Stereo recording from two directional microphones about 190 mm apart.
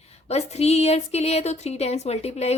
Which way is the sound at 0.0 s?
35° left (ahead or behind).